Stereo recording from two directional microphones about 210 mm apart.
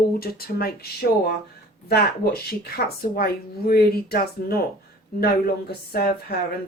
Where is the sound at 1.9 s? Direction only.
50° left (ahead or behind).